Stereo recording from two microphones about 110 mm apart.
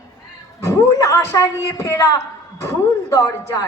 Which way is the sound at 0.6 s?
30° left (ahead or behind).